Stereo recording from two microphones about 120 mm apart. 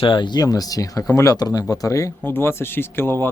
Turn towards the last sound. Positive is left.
turn(degrees=20)  # may be behind; listen again after turning